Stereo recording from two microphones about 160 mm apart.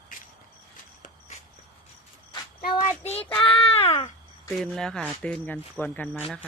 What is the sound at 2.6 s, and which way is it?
Child singing, 65° left (ahead or behind).